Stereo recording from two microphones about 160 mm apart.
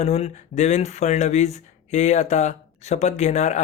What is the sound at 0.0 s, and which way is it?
Speech, 40° left (ahead or behind).